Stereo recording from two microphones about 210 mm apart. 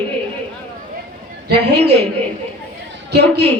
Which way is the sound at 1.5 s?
50° right (ahead or behind).